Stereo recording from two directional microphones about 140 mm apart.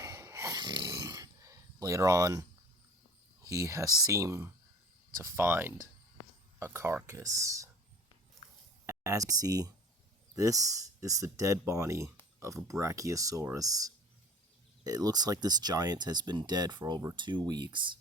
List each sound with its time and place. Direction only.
0.0 s a sound: 20° right (ahead or behind)
3.4 s speech: 20° right (ahead or behind)
8.9 s speech: 20° right (ahead or behind)